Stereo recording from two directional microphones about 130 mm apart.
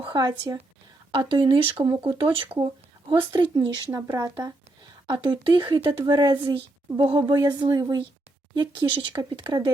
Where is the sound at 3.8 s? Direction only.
25° right (ahead or behind).